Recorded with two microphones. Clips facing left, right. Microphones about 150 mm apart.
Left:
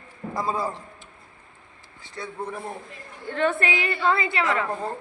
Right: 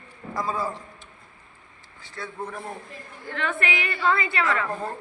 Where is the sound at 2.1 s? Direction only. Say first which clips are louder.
Left 2 dB; 15° left (ahead or behind).